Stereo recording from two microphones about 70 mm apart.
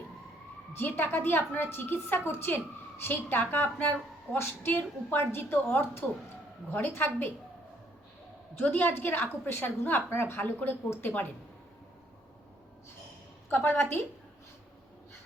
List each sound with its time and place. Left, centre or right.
0.8 s a woman's voice: left
8.6 s a woman's voice: left
13.5 s a woman's voice: left